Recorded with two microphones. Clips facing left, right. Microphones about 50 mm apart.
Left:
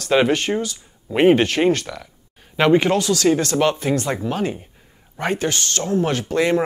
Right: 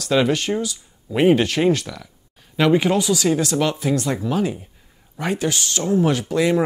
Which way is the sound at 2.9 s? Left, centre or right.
Centre.